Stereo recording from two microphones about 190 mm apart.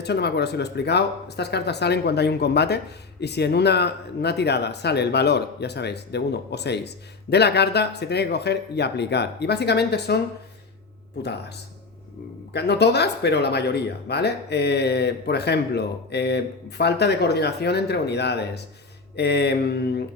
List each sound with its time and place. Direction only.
0.0 s speech: 60° left (ahead or behind)
11.2 s speech: 60° left (ahead or behind)
12.5 s speech: 60° left (ahead or behind)